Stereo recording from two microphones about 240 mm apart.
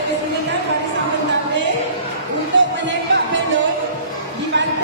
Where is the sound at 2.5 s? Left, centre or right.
Right.